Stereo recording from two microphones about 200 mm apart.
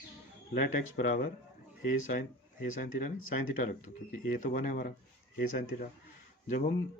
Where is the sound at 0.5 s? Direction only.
40° left (ahead or behind).